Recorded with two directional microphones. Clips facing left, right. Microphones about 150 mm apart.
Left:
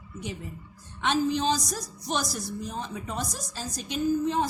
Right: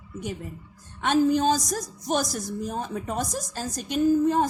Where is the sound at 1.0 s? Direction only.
50° right (ahead or behind).